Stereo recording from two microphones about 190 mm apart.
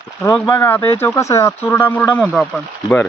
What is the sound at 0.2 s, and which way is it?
Speech, 15° left (ahead or behind).